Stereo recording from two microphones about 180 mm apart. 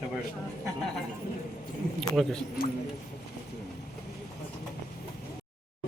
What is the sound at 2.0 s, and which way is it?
Speech, centre (ahead or behind).